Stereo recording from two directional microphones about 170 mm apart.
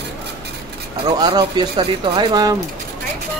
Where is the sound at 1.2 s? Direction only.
25° right (ahead or behind).